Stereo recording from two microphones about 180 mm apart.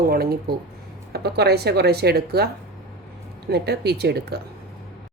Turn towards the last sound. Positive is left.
turn(degrees=-65)  # may be behind; listen again after turning